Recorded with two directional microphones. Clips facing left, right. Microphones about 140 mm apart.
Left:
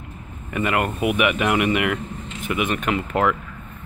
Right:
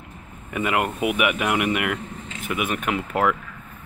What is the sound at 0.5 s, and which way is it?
Speech, 5° right (ahead or behind).